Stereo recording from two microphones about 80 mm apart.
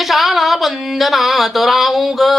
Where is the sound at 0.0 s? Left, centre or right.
Centre.